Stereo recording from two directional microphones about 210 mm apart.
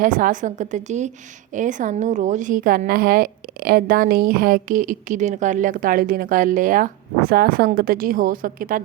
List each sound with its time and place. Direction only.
0.0 s a woman's voice: 40° right (ahead or behind)